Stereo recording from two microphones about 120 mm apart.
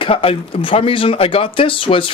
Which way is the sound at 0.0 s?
50° left (ahead or behind).